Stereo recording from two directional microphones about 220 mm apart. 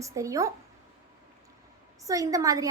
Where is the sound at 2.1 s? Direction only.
15° right (ahead or behind).